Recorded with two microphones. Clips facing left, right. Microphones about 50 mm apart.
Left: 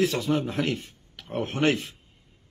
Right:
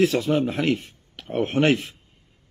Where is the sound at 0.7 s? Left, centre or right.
Right.